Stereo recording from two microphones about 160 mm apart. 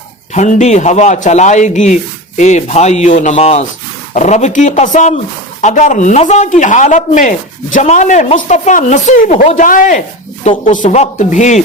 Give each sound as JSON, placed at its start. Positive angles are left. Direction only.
{"t": 0.3, "sound": "speech", "side_deg": 45}
{"t": 10.7, "sound": "speech", "side_deg": 45}